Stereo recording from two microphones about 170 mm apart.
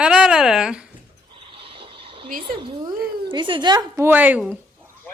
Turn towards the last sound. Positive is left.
turn(degrees=-5)  # may be behind; listen again after turning